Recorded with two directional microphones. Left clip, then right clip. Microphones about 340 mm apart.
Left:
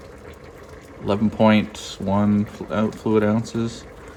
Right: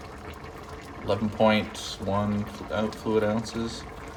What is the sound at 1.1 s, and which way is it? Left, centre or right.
Speech, centre.